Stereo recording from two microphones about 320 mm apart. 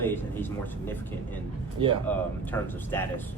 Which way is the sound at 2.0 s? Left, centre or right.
Centre.